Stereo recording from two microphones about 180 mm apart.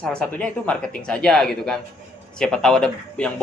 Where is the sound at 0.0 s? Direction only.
5° left (ahead or behind).